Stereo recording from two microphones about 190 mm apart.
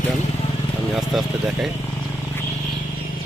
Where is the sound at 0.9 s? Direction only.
Centre (ahead or behind).